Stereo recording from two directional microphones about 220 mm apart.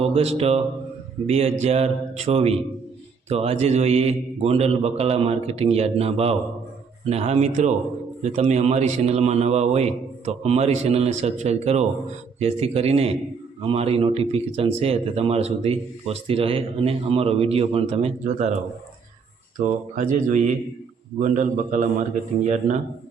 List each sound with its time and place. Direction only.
0.0 s a man's voice: 30° right (ahead or behind)
19.5 s speech: 35° right (ahead or behind)